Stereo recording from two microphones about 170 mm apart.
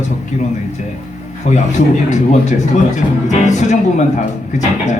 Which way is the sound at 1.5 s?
45° left (ahead or behind).